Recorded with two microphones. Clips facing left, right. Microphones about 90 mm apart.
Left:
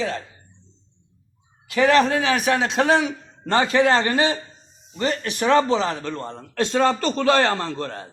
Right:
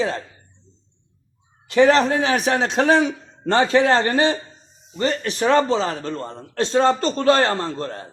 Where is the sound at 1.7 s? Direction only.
35° right (ahead or behind).